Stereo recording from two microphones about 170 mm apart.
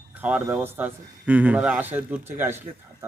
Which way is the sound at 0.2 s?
10° right (ahead or behind).